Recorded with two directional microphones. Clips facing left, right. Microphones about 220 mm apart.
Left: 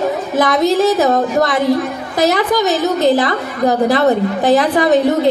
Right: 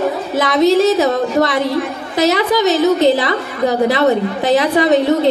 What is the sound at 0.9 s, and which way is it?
A woman's voice, 45° left (ahead or behind).